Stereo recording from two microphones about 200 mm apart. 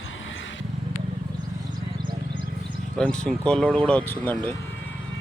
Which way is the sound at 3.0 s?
5° left (ahead or behind).